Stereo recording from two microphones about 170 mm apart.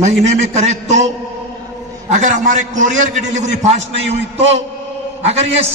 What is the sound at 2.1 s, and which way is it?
A man's voice, 45° right (ahead or behind).